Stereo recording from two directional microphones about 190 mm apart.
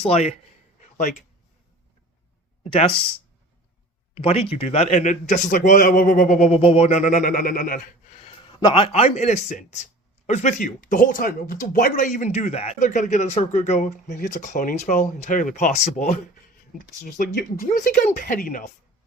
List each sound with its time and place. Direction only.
0.0 s speech: 35° left (ahead or behind)
0.8 s a sound: 40° left (ahead or behind)
4.1 s speech: 30° left (ahead or behind); by 7.8 s 50° left (ahead or behind)
8.4 s speech: 25° left (ahead or behind); by 18.7 s 45° left (ahead or behind)